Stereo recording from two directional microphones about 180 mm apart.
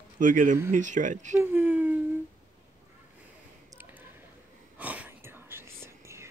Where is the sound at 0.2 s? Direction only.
45° right (ahead or behind).